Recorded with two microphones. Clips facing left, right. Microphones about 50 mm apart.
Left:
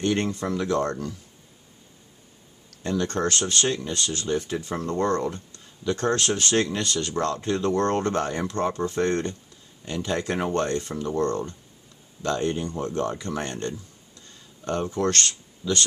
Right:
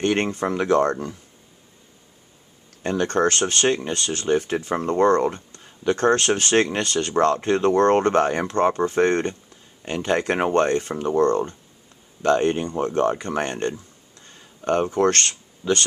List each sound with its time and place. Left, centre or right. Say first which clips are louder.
0.0 s speech: right 3 dB; right
2.8 s speech: right 5 dB; right
14.2 s a sound: right 7 dB; right